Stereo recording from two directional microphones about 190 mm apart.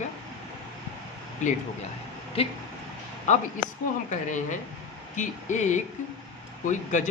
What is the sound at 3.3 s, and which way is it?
Speech, 40° left (ahead or behind).